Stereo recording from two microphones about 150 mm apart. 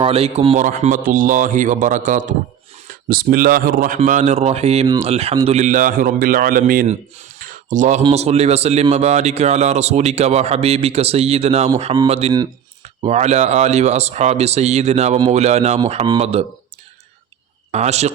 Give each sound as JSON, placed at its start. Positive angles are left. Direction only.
{"t": 0.0, "sound": "speech", "side_deg": -40}
{"t": 1.0, "sound": "speech", "side_deg": -65}
{"t": 3.1, "sound": "a man's voice", "side_deg": -80}
{"t": 7.3, "sound": "a sound", "side_deg": -65}
{"t": 8.1, "sound": "speech", "side_deg": -45}
{"t": 17.7, "sound": "a man's voice", "side_deg": -45}